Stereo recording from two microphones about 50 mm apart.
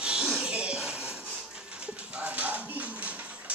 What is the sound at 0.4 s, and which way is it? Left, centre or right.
Music, right.